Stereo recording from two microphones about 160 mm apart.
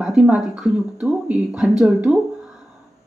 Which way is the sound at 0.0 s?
5° right (ahead or behind).